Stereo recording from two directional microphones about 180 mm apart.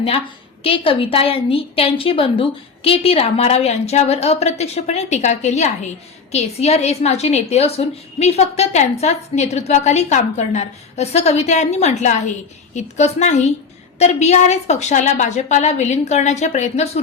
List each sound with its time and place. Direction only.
0.6 s a woman's voice: 30° left (ahead or behind)